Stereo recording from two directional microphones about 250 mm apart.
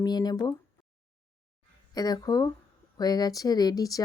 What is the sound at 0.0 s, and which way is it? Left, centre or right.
Speech, centre.